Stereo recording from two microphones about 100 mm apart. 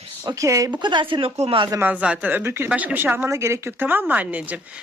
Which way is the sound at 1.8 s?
15° right (ahead or behind).